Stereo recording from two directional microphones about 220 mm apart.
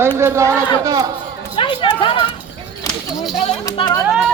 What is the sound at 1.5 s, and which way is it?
Speech, 25° left (ahead or behind).